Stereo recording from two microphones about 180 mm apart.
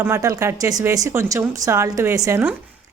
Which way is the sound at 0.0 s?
15° right (ahead or behind).